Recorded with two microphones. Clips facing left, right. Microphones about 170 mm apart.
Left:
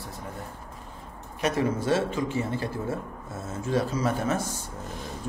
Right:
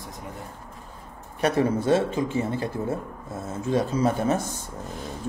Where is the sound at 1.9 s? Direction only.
25° right (ahead or behind).